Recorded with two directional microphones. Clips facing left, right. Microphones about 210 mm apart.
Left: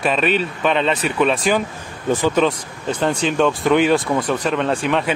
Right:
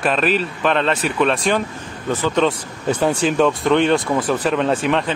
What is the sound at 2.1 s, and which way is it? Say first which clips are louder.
Speech: left 2 dB; 10° left (ahead or behind).